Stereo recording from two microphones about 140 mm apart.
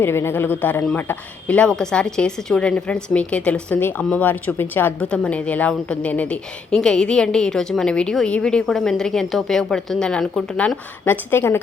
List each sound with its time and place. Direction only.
0.0 s speech: 15° left (ahead or behind)
11.0 s speech: 15° left (ahead or behind)